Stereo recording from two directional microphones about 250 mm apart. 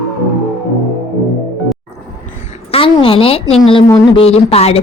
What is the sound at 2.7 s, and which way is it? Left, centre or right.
A woman's voice, left.